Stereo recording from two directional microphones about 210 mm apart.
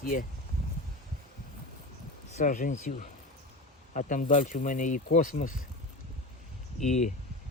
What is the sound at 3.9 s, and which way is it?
Speech, 35° left (ahead or behind).